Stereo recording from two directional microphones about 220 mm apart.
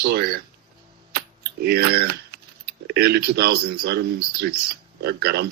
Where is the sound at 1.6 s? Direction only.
45° right (ahead or behind).